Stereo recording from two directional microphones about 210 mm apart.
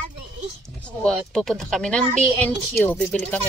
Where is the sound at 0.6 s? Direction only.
5° left (ahead or behind).